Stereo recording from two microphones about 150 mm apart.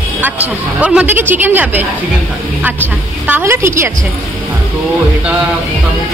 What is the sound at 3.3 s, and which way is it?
Speech, 15° right (ahead or behind).